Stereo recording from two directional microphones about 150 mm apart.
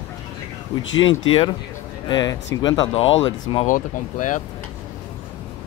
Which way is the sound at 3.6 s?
55° left (ahead or behind).